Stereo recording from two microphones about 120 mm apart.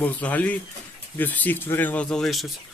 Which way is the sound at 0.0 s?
15° left (ahead or behind).